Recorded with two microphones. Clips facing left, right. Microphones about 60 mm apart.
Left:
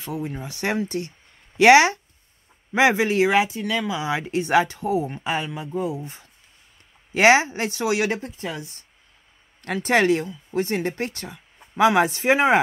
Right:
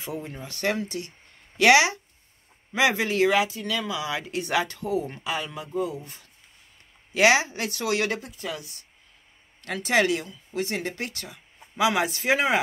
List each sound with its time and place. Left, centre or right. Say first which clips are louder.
0.2 s speech: left 2 dB; centre
0.8 s speech: left 6 dB; left